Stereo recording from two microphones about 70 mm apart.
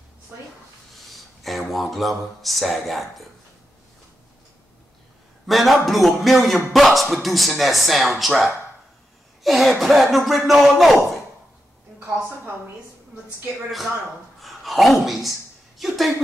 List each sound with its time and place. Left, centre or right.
0.3 s speech: right
1.0 s speech: centre
5.5 s speech: centre
14.4 s speech: centre